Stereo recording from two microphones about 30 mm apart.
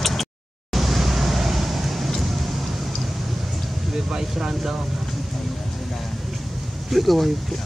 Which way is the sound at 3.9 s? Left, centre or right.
Right.